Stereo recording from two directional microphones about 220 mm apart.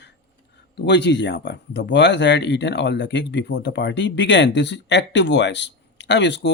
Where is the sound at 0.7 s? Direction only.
50° left (ahead or behind).